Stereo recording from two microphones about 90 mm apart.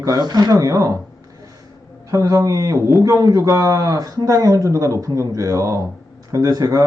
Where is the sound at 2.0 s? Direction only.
40° right (ahead or behind).